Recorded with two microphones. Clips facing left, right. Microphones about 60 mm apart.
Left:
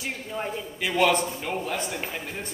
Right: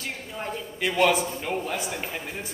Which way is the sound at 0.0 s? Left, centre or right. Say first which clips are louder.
Left 2 dB; centre.